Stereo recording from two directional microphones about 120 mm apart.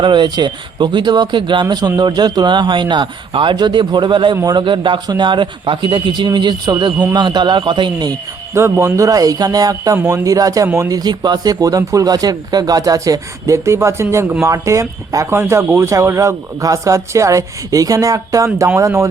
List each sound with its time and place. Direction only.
0.0 s speech: 40° right (ahead or behind)
8.5 s speech: 20° right (ahead or behind)